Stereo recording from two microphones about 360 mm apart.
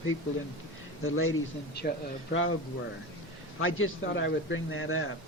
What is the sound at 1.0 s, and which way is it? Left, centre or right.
Speech, left.